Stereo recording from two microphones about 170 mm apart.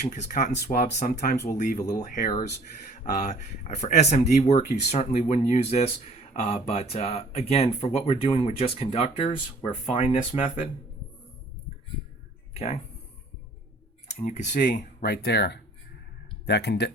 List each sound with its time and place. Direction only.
0.1 s speech: 50° left (ahead or behind); by 10.7 s 30° left (ahead or behind)
12.5 s speech: 40° left (ahead or behind)
14.3 s speech: 45° left (ahead or behind); by 16.9 s 75° left (ahead or behind)